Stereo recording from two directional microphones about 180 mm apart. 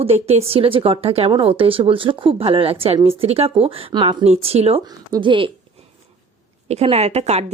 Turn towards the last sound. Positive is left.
turn(degrees=-35)  # may be behind; listen again after turning